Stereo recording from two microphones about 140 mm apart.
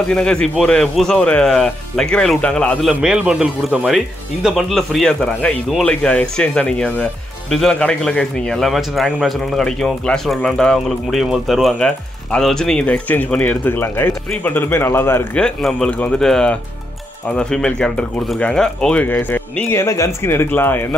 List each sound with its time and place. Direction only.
0.1 s a man's voice: 5° left (ahead or behind)
2.9 s a man's voice: 5° right (ahead or behind); by 15.4 s 15° left (ahead or behind)
15.4 s speech: 5° left (ahead or behind)